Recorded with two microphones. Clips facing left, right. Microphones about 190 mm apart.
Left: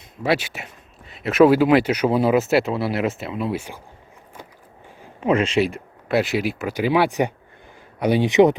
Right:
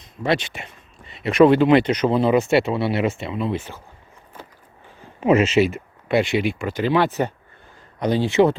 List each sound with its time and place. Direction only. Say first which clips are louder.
0.2 s speech: even; 5° left (ahead or behind)
4.4 s biting: even; 15° left (ahead or behind)
5.2 s speech: right 3 dB; 5° right (ahead or behind); by 8.5 s 15° left (ahead or behind)